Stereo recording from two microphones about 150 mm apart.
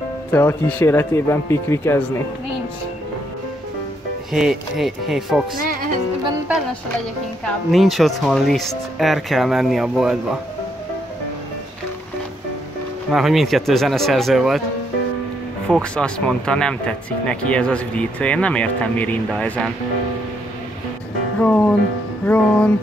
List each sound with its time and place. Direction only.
0.3 s speech: 15° left (ahead or behind)
4.3 s speech: centre (ahead or behind)
7.7 s speech: centre (ahead or behind)
13.1 s speech: centre (ahead or behind)
15.7 s speech: 5° left (ahead or behind)
21.4 s speech: 10° left (ahead or behind)